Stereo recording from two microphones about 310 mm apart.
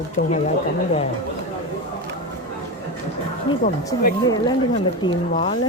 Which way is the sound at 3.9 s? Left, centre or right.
Centre.